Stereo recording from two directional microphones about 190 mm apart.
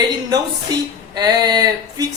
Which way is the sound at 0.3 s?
20° right (ahead or behind).